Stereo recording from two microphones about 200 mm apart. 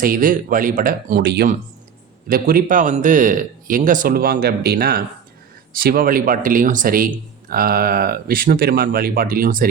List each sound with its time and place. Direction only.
0.0 s speech: 45° right (ahead or behind)